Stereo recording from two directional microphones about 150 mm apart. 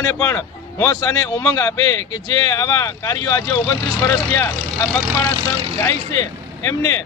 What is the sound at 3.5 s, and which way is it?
Speech, 15° left (ahead or behind).